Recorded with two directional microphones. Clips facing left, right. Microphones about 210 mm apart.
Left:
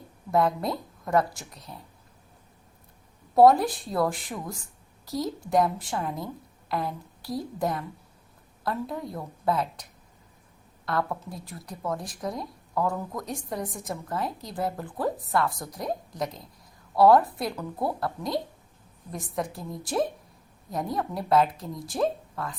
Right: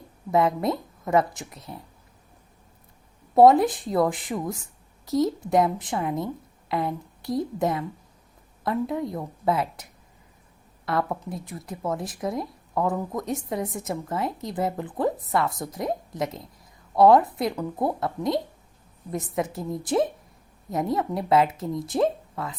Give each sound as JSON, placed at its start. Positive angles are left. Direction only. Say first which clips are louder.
{"t": 0.3, "sound": "a woman's voice", "louder": "right 2 dB", "side_deg": -20}
{"t": 3.3, "sound": "a woman's voice", "louder": "right 2 dB", "side_deg": -20}
{"t": 10.8, "sound": "a woman's voice", "louder": "right 2 dB", "side_deg": -20}